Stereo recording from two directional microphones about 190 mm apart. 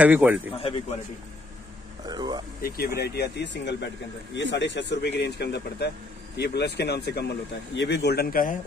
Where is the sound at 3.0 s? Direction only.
60° left (ahead or behind).